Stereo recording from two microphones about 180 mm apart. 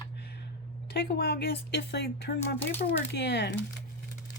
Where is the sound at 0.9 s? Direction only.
60° left (ahead or behind).